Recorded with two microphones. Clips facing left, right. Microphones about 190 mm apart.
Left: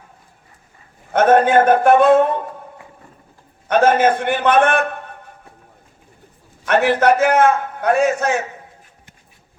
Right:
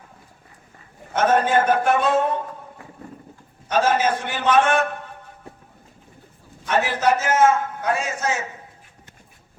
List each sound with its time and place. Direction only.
1.1 s a man's voice: 55° left (ahead or behind)
3.7 s a man's voice: 60° left (ahead or behind)
6.7 s a man's voice: 65° left (ahead or behind)